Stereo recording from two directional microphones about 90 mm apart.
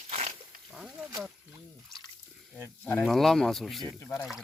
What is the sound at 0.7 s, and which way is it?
Wild animals, 5° right (ahead or behind).